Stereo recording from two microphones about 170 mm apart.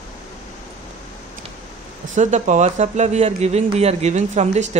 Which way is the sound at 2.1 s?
45° right (ahead or behind).